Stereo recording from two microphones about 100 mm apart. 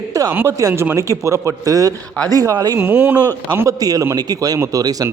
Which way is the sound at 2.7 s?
20° right (ahead or behind).